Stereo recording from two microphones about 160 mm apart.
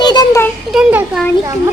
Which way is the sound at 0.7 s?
5° right (ahead or behind).